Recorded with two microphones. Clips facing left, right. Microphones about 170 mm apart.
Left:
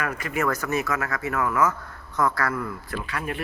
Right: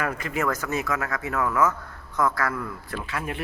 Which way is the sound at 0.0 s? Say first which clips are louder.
Even; 25° right (ahead or behind).